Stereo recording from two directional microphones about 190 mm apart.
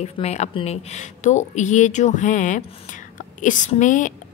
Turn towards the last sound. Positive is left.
turn(degrees=40)  # may be behind; listen again after turning